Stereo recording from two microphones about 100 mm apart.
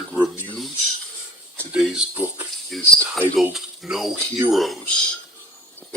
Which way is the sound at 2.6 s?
Centre (ahead or behind).